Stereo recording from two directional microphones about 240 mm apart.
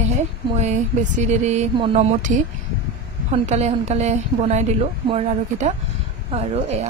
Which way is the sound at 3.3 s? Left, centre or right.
Right.